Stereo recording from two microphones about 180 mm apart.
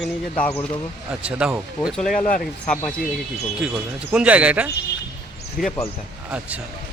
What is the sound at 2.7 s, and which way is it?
Speech, 5° left (ahead or behind).